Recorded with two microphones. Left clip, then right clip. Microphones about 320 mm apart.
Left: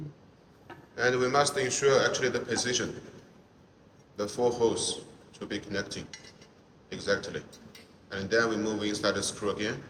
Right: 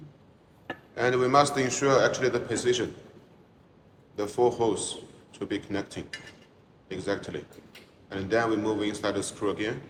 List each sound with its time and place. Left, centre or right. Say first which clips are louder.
0.9 s a man's voice: right 3 dB; centre
4.1 s a man's voice: right 3 dB; right